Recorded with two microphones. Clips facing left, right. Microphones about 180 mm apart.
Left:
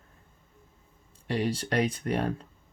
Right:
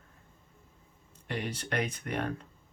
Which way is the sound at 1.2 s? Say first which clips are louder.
Left 7 dB; 35° left (ahead or behind).